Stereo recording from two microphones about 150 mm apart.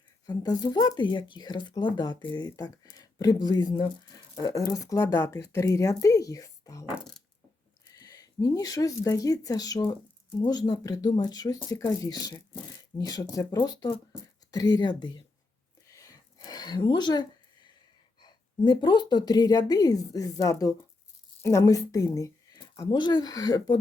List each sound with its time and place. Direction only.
0.3 s speech: 30° left (ahead or behind)
7.9 s speech: 25° left (ahead or behind)
15.9 s a sound: 20° left (ahead or behind)
18.2 s speech: 30° left (ahead or behind)